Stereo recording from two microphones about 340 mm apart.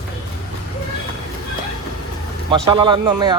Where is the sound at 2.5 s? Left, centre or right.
Centre.